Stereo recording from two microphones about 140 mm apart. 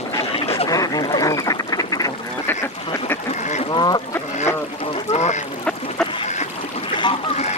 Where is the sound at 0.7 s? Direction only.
25° left (ahead or behind).